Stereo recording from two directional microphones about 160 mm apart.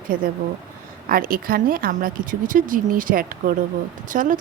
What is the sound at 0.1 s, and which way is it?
A woman's voice, 60° right (ahead or behind).